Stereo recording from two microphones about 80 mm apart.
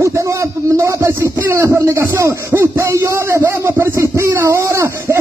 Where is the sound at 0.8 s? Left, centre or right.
Right.